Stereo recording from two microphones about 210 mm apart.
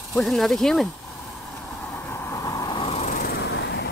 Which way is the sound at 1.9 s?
10° left (ahead or behind).